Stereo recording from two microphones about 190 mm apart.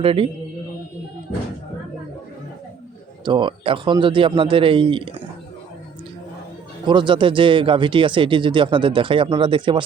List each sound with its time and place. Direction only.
0.0 s speech: 30° right (ahead or behind)
3.2 s speech: 25° right (ahead or behind)
6.8 s speech: 25° right (ahead or behind)